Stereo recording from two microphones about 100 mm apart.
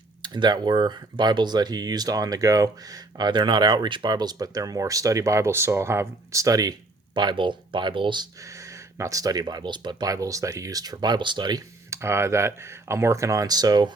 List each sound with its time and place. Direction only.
0.2 s speech: 50° right (ahead or behind)
7.1 s speech: 50° right (ahead or behind)
9.0 s speech: 35° right (ahead or behind)
11.9 s speech: 25° right (ahead or behind); by 13.9 s 45° right (ahead or behind)